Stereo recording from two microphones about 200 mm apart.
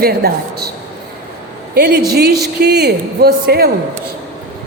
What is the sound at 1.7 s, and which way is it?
A woman's voice, 50° right (ahead or behind).